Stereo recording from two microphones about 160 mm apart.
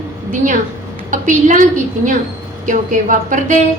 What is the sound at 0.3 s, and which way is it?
A woman's voice, 55° right (ahead or behind).